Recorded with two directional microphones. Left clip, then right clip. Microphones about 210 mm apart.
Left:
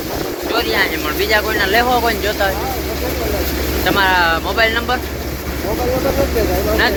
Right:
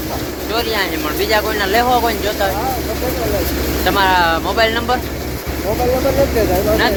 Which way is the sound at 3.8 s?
15° right (ahead or behind).